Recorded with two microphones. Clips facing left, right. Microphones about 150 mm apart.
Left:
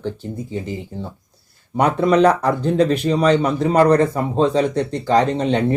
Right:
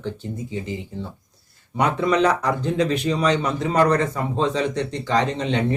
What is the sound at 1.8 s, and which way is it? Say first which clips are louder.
Speech: left 5 dB; 35° left (ahead or behind).